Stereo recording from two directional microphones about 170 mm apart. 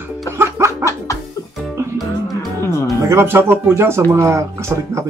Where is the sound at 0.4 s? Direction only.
15° right (ahead or behind).